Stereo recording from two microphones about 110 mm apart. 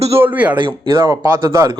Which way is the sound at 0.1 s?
15° right (ahead or behind).